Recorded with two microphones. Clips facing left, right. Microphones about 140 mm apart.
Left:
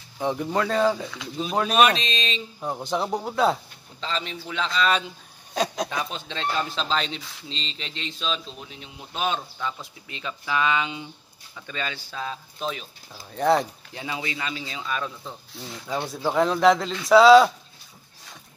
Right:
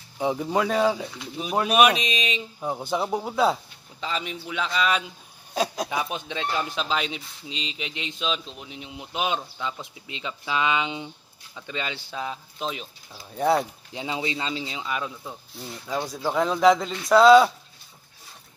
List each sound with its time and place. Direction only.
0.2 s speech: 10° right (ahead or behind)
2.6 s speech: 5° right (ahead or behind)
4.0 s speech: 10° right (ahead or behind)
5.9 s speech: 15° right (ahead or behind)
13.1 s speech: 5° right (ahead or behind)
13.9 s speech: 20° right (ahead or behind)
16.1 s speech: centre (ahead or behind)